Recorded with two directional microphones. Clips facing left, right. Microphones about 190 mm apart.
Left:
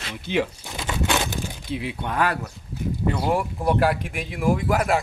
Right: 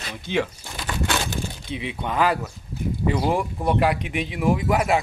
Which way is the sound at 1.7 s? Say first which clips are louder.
Left 1 dB; 5° left (ahead or behind).